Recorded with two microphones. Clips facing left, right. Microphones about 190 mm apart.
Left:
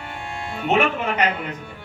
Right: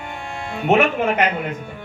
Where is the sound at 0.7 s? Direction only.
50° right (ahead or behind).